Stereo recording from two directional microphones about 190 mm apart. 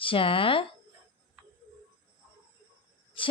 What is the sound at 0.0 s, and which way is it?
Speech, 30° left (ahead or behind).